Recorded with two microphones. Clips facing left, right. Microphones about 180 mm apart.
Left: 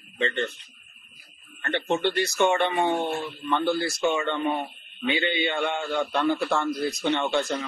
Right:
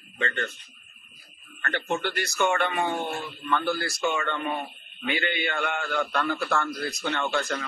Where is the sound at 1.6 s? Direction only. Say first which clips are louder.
Left 4 dB; 25° left (ahead or behind).